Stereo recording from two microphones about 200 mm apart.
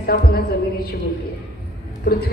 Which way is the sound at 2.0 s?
55° left (ahead or behind).